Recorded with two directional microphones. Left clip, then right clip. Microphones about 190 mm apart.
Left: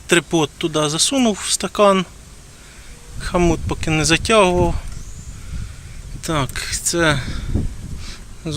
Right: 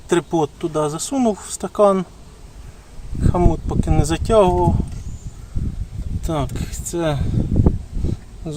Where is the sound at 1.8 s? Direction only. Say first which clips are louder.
Left 1 dB; 5° left (ahead or behind).